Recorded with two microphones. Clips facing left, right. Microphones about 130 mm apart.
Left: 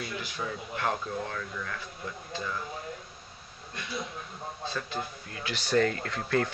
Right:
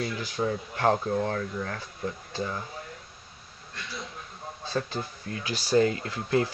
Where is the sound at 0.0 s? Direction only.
35° right (ahead or behind).